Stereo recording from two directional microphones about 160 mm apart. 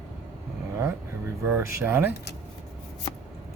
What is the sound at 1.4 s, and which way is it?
Speech, 15° right (ahead or behind).